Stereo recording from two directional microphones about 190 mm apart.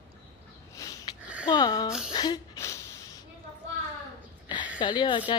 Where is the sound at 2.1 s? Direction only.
20° left (ahead or behind).